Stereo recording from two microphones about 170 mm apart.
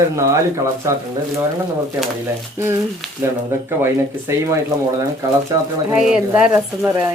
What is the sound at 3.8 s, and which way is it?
Speech, 15° right (ahead or behind).